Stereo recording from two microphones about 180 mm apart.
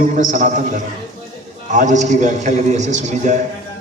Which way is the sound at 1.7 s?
45° right (ahead or behind).